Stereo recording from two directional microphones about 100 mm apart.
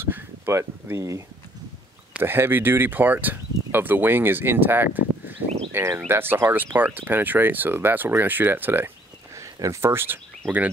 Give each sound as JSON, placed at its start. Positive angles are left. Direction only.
{"t": 0.0, "sound": "speech", "side_deg": -25}